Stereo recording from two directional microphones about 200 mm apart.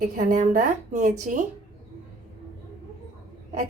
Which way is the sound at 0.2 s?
40° right (ahead or behind).